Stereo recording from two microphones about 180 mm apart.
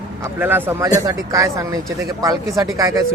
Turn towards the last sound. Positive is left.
turn(degrees=-20)  # may be behind; listen again after turning